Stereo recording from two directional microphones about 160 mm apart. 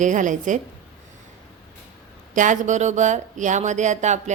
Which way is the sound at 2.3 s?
50° right (ahead or behind).